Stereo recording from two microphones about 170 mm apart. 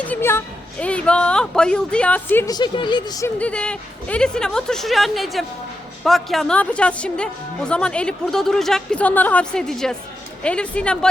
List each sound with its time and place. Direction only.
0.0 s a woman's voice: 10° left (ahead or behind)
2.5 s speech: 25° left (ahead or behind)
3.3 s a woman's voice: 5° left (ahead or behind)